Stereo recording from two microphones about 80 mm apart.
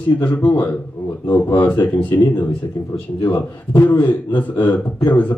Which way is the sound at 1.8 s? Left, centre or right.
Left.